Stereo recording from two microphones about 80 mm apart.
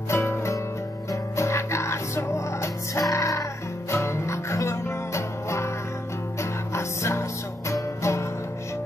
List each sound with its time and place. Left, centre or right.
0.1 s music: left
6.7 s music: left